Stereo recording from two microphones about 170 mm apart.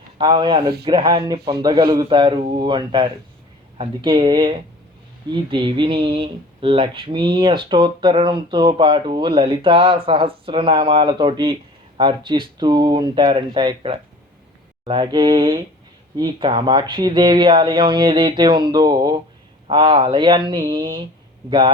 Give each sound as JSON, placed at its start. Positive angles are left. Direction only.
{"t": 0.2, "sound": "speech", "side_deg": -30}